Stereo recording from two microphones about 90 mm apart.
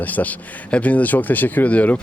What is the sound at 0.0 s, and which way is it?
Speech, 20° left (ahead or behind).